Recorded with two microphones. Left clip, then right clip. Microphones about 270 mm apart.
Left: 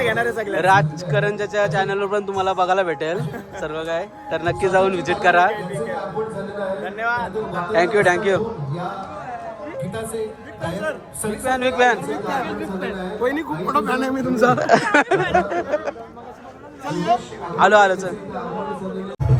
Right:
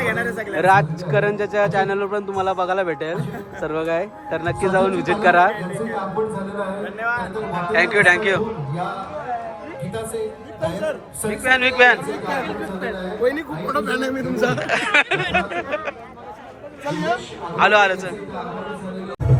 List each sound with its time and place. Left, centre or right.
0.0 s a man's voice: centre
6.8 s a man's voice: left
7.7 s a man's voice: centre
9.9 s a man's voice: centre
11.5 s a man's voice: centre
13.7 s a man's voice: left
16.8 s a man's voice: centre
17.6 s a man's voice: centre